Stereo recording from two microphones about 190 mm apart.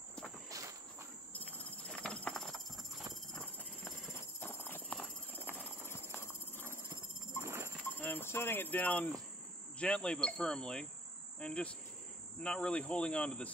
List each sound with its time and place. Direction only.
0.5 s insect: 15° right (ahead or behind)
2.0 s horse: 5° left (ahead or behind)
3.3 s a sound: centre (ahead or behind)
4.1 s horse: 10° left (ahead or behind)
5.5 s clip-clop: 10° left (ahead or behind)
7.4 s a sound: 15° right (ahead or behind)
7.9 s speech: 10° left (ahead or behind)
9.8 s cricket: 5° left (ahead or behind)